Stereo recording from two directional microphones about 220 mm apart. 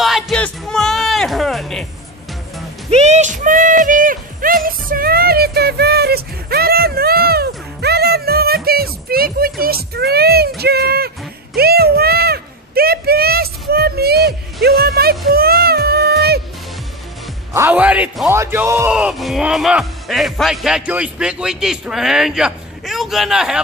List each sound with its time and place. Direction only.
0.0 s music: centre (ahead or behind)
2.9 s a sound: 30° right (ahead or behind); by 16.3 s 45° right (ahead or behind)
17.5 s a man's voice: 10° right (ahead or behind)